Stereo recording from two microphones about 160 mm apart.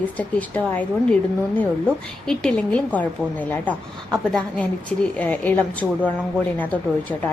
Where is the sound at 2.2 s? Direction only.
5° left (ahead or behind).